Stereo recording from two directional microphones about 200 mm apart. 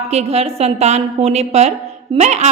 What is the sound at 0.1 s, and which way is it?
A woman's voice, 30° right (ahead or behind).